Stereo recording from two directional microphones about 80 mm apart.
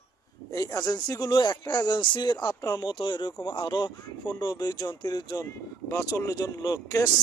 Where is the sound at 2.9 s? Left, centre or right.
Left.